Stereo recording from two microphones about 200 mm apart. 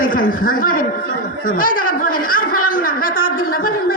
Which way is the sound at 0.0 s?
45° left (ahead or behind).